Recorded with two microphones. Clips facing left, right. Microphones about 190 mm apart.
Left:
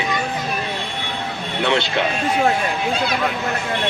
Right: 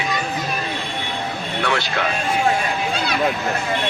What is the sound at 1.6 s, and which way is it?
Speech, 25° left (ahead or behind).